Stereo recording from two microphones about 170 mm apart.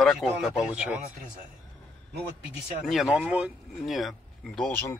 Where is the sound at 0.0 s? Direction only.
Centre (ahead or behind).